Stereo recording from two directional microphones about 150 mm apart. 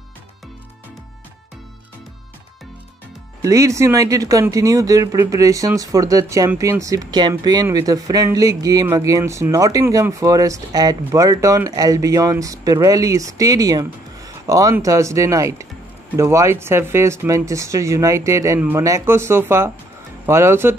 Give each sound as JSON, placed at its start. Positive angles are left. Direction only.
{"t": 3.4, "sound": "speech", "side_deg": -20}